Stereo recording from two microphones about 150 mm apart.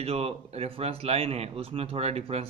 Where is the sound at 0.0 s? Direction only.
40° right (ahead or behind).